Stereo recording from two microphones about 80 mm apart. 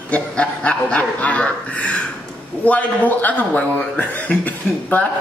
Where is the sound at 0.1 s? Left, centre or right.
Centre.